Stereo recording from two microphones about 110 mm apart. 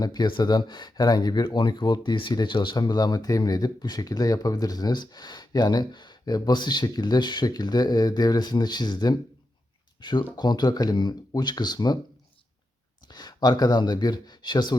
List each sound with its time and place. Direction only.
0.0 s speech: 40° left (ahead or behind)
13.1 s speech: 40° left (ahead or behind)